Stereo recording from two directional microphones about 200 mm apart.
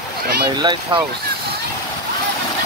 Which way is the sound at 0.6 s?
25° right (ahead or behind).